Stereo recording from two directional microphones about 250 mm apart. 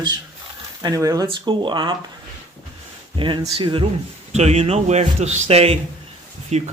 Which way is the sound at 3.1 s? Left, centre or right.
Centre.